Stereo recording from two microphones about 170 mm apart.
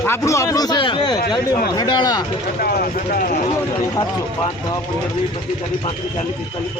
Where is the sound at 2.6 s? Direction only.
60° left (ahead or behind).